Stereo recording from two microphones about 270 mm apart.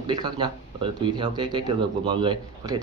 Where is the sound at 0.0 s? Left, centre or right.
Centre.